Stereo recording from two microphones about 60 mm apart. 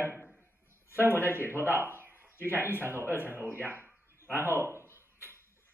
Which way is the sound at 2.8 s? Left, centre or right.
Right.